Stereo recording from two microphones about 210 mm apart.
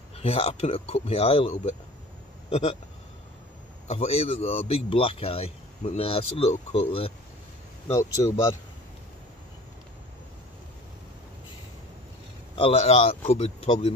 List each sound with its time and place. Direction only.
0.1 s a man's voice: 30° left (ahead or behind)
3.8 s a man's voice: 30° left (ahead or behind)
7.9 s speech: 15° left (ahead or behind)
12.5 s a man's voice: 30° left (ahead or behind)